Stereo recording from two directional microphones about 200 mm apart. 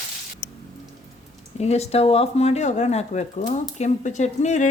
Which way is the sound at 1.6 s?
30° left (ahead or behind).